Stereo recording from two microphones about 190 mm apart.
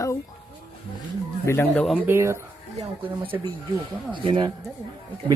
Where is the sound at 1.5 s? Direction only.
10° left (ahead or behind).